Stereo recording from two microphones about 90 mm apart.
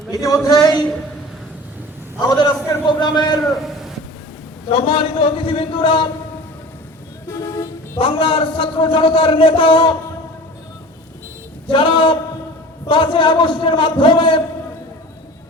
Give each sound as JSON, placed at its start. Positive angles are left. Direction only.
{"t": 0.1, "sound": "speech", "side_deg": 40}
{"t": 0.5, "sound": "speech", "side_deg": 0}
{"t": 2.2, "sound": "a sound", "side_deg": 45}
{"t": 4.7, "sound": "a man's voice", "side_deg": 65}
{"t": 7.3, "sound": "vehicle", "side_deg": 35}
{"t": 7.9, "sound": "a man's voice", "side_deg": 70}
{"t": 11.7, "sound": "a man's voice", "side_deg": 65}